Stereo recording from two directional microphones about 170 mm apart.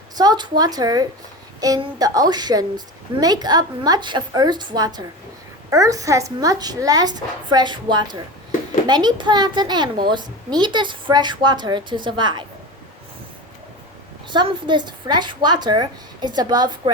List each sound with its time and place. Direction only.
0.2 s a woman's voice: 25° right (ahead or behind)
14.3 s a woman's voice: 30° right (ahead or behind)